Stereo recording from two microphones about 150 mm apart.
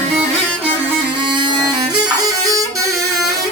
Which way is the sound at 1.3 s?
30° right (ahead or behind).